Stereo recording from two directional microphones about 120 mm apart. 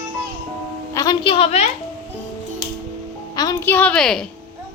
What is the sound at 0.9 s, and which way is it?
Music, 30° left (ahead or behind).